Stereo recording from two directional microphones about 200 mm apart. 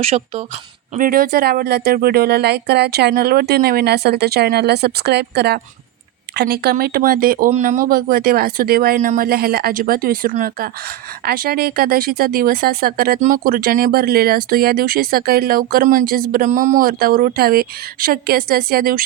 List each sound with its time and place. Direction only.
0.0 s speech: 30° right (ahead or behind)
0.9 s speech: 45° right (ahead or behind)